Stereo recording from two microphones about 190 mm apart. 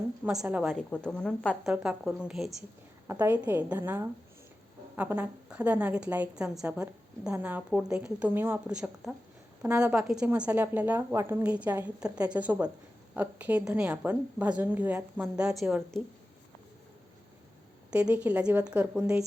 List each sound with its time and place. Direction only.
0.3 s a woman's voice: 5° right (ahead or behind)
17.9 s a woman's voice: 5° right (ahead or behind)